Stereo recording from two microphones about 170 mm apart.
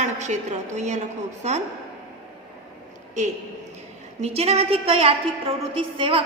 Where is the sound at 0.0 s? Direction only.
45° right (ahead or behind).